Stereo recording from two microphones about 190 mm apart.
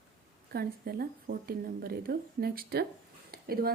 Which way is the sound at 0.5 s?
55° right (ahead or behind).